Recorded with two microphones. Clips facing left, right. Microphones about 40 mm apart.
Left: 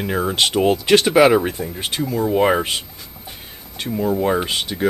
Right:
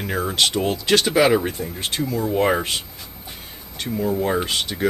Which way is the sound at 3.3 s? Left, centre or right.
Centre.